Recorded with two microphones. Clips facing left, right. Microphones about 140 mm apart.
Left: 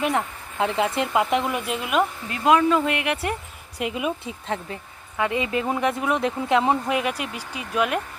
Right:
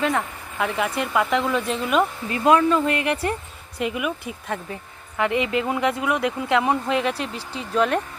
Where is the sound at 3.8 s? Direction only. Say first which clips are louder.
Right 1 dB; 25° left (ahead or behind).